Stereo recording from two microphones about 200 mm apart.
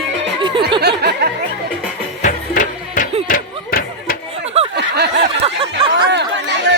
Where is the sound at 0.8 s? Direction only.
55° right (ahead or behind).